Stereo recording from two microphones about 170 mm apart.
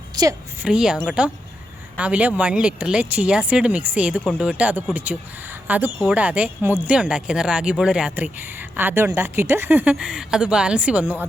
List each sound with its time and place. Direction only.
0.2 s a woman's voice: 25° right (ahead or behind)
0.6 s a woman's voice: 5° right (ahead or behind)